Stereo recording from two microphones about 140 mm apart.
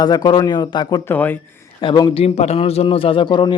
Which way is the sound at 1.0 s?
15° left (ahead or behind).